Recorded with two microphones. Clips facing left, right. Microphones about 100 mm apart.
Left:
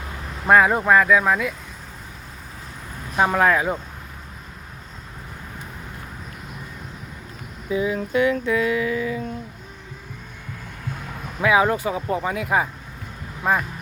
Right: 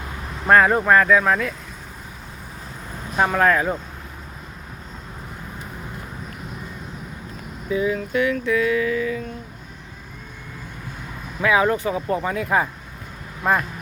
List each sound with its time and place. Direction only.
0.4 s speech: 5° left (ahead or behind)
3.2 s speech: 10° left (ahead or behind)
7.7 s a sound: 25° left (ahead or behind)
11.3 s speech: 15° left (ahead or behind)